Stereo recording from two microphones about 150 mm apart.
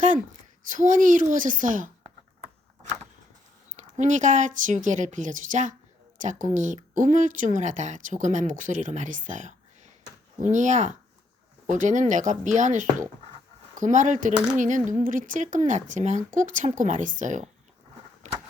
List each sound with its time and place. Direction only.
0.7 s speech: 60° right (ahead or behind)
3.8 s speech: 55° right (ahead or behind)